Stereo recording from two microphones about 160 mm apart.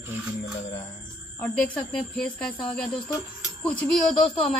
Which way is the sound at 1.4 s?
5° left (ahead or behind).